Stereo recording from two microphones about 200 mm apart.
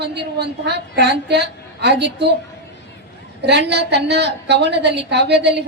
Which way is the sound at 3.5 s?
55° right (ahead or behind).